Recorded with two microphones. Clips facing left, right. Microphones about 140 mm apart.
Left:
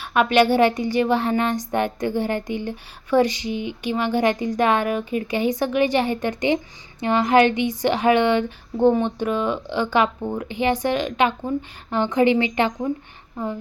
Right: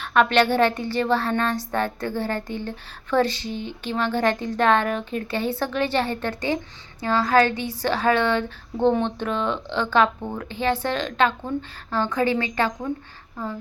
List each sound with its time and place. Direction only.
0.0 s a woman's voice: 10° left (ahead or behind)